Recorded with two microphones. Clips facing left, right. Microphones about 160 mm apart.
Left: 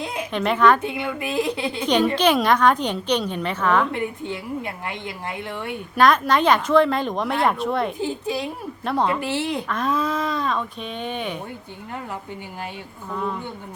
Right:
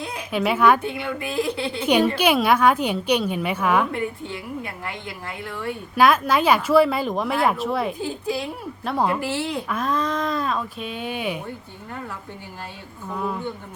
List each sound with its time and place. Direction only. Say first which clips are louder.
0.3 s a woman's voice: even; 5° right (ahead or behind)
0.9 s a woman's voice: left 1 dB; 20° left (ahead or behind)
1.9 s a woman's voice: even; 10° right (ahead or behind)
3.9 s a woman's voice: left 1 dB; 20° left (ahead or behind)
6.0 s speech: even; 5° right (ahead or behind)
9.2 s a woman's voice: left 1 dB; 20° left (ahead or behind)
9.6 s speech: left 1 dB; 5° right (ahead or behind)